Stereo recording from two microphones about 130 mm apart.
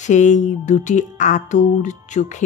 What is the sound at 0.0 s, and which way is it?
Speech, 70° left (ahead or behind).